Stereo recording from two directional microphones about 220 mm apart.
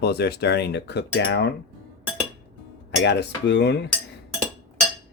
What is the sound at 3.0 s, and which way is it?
Speech, 50° left (ahead or behind).